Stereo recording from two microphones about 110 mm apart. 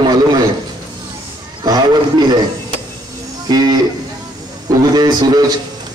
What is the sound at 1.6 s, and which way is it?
Speech, 40° right (ahead or behind).